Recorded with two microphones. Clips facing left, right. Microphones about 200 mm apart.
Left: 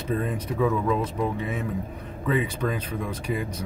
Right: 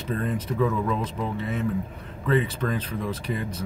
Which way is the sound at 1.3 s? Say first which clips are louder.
Right 2 dB; 10° left (ahead or behind).